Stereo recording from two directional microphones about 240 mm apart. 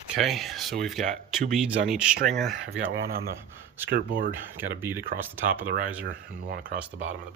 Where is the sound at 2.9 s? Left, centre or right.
Right.